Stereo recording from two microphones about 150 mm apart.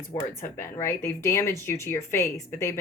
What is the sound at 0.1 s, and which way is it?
Speech, 15° left (ahead or behind).